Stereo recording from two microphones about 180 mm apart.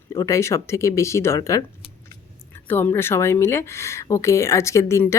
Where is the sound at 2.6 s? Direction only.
10° left (ahead or behind).